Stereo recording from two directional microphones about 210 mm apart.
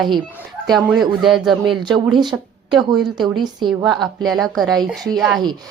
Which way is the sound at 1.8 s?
20° right (ahead or behind).